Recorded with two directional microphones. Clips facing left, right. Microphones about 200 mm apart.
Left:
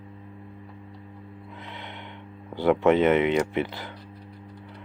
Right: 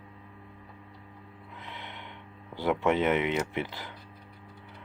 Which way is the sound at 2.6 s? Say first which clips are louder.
Left 6 dB; 60° left (ahead or behind).